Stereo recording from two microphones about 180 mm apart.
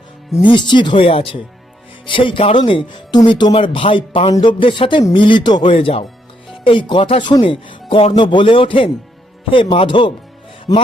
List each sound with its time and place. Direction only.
0.4 s speech: 25° left (ahead or behind)